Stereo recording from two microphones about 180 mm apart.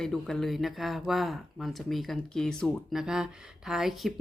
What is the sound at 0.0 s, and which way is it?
Speech, 5° left (ahead or behind).